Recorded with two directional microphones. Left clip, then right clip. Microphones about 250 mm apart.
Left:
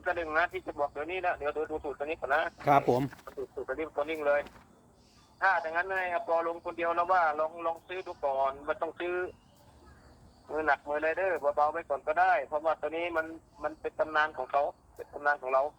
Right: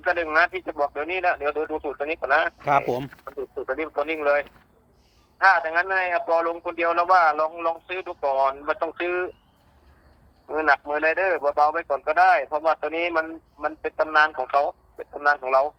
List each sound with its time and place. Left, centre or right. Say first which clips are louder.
0.0 s speech: right 9 dB; right
2.6 s speech: right 3 dB; centre
3.2 s speech: right 8 dB; right
10.5 s speech: right 8 dB; right